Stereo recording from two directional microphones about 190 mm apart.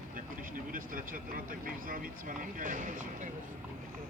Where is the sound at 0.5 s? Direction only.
45° right (ahead or behind).